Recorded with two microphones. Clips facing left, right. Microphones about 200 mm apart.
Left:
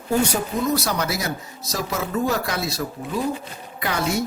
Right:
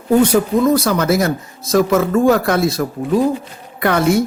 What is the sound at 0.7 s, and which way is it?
A woman's voice, 50° right (ahead or behind).